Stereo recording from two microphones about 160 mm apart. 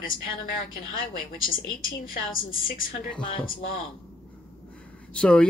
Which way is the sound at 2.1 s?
60° left (ahead or behind).